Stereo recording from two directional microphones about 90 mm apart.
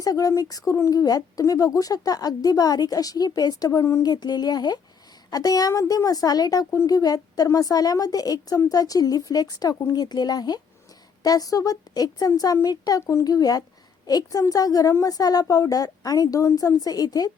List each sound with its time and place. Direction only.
0.0 s speech: 40° left (ahead or behind)
4.0 s speech: 50° left (ahead or behind)
13.0 s a woman's voice: 35° left (ahead or behind)